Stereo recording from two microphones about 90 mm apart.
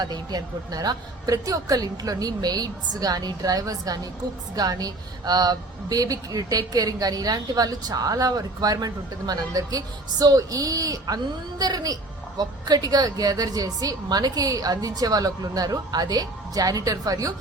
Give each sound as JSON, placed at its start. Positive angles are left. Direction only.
{"t": 0.0, "sound": "a woman's voice", "side_deg": -50}